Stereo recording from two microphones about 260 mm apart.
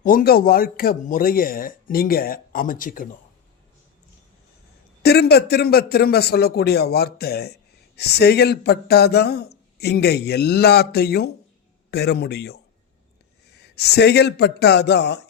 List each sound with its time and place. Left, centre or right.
0.0 s a man's voice: left
5.0 s a man's voice: left
13.7 s a man's voice: left